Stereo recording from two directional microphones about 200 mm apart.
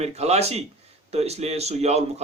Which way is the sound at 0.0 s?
30° right (ahead or behind).